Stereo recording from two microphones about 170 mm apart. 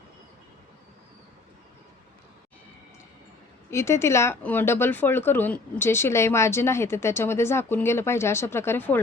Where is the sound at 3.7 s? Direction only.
15° left (ahead or behind).